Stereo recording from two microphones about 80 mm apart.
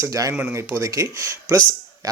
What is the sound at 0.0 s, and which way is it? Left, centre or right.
Speech, right.